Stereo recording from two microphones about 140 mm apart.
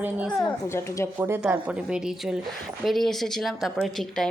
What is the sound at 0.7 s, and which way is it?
Speech, 20° left (ahead or behind).